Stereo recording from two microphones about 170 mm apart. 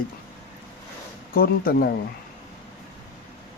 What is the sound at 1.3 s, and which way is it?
Speech, 60° left (ahead or behind).